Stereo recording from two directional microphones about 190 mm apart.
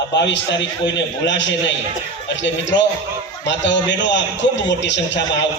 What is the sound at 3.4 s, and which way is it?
A man's voice, 70° left (ahead or behind).